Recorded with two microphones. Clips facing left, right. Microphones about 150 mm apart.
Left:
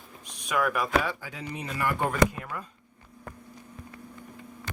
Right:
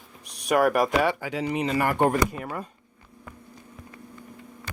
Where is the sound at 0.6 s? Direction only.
70° right (ahead or behind).